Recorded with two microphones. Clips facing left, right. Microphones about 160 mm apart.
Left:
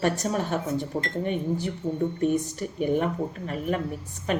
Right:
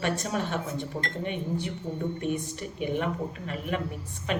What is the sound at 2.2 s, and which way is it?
A woman's voice, 40° left (ahead or behind).